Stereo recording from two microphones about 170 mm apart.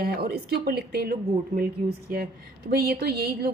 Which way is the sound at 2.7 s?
65° right (ahead or behind).